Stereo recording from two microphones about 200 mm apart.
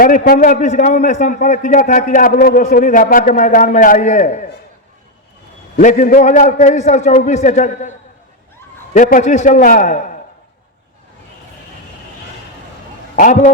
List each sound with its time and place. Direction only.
0.0 s a man's voice: 45° left (ahead or behind)
5.8 s a man's voice: 40° left (ahead or behind)
13.1 s a man's voice: 40° left (ahead or behind)